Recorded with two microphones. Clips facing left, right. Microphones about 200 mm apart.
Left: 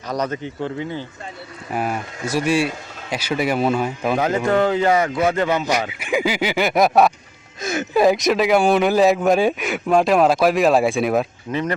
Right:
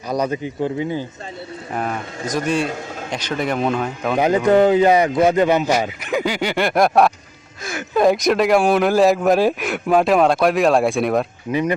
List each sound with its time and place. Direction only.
0.1 s speech: 10° right (ahead or behind)
1.7 s speech: 10° left (ahead or behind)
4.2 s speech: 15° right (ahead or behind)
6.1 s speech: 5° left (ahead or behind)
7.6 s a sound: 20° left (ahead or behind)
7.9 s speech: centre (ahead or behind)